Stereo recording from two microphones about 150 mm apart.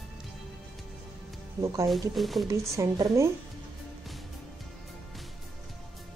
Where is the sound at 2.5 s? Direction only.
20° right (ahead or behind).